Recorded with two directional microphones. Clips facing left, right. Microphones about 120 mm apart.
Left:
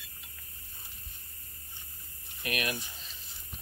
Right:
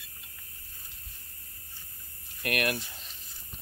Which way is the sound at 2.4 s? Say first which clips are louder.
Right 4 dB; 65° right (ahead or behind).